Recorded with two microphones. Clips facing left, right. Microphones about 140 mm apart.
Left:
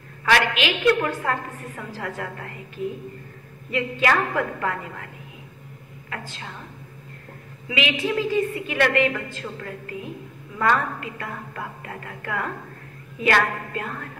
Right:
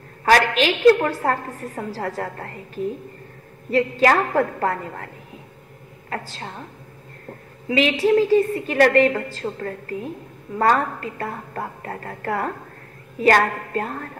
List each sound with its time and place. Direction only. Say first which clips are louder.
0.2 s a woman's voice: right 4 dB; 40° right (ahead or behind)
7.6 s a woman's voice: right 6 dB; 40° right (ahead or behind)